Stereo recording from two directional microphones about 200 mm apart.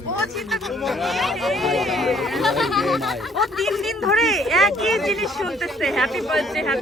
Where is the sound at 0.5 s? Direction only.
Centre (ahead or behind).